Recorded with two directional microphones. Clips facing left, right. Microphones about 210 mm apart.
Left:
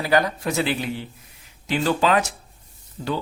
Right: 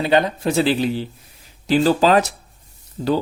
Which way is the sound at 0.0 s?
25° right (ahead or behind).